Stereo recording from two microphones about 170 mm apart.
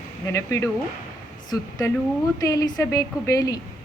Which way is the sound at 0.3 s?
15° left (ahead or behind).